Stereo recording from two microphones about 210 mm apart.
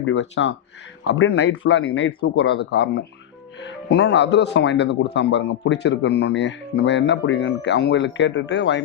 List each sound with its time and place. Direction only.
0.0 s speech: 65° left (ahead or behind)